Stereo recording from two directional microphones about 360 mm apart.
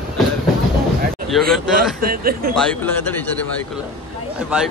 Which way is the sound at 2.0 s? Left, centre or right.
Right.